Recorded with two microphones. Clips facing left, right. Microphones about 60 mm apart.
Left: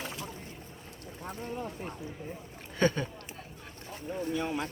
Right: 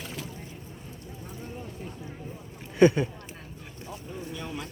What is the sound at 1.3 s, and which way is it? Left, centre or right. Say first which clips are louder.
Vehicle: left 4 dB; left.